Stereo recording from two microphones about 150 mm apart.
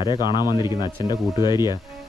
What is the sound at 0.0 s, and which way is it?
A man's voice, 30° left (ahead or behind).